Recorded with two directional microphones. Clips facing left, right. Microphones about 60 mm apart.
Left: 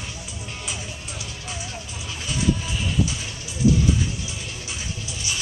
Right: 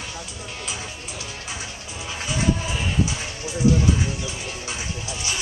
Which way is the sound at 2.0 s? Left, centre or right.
Right.